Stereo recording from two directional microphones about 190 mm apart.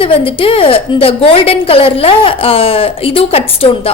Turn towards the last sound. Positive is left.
turn(degrees=30)  # may be behind; listen again after turning